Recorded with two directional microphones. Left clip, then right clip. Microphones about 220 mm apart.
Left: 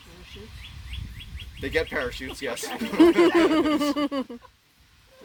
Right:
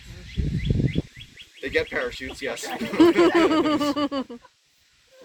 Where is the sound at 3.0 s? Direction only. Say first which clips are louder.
Right 1 dB; 10° left (ahead or behind).